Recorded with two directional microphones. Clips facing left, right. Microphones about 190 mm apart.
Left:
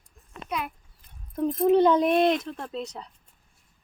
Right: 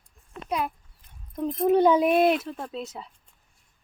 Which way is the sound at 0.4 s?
35° right (ahead or behind).